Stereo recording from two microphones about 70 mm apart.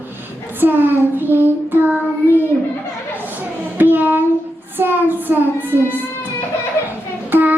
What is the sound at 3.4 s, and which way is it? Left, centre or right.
Child singing, right.